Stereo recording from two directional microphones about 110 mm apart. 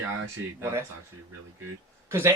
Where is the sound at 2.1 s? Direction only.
25° right (ahead or behind).